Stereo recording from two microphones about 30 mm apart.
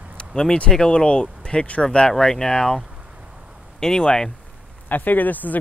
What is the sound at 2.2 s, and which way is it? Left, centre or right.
Speech, centre.